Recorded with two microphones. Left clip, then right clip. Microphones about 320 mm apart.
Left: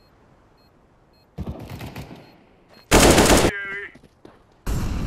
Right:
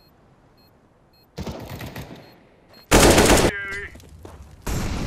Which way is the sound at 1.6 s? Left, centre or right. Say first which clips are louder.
Right 1 dB; centre.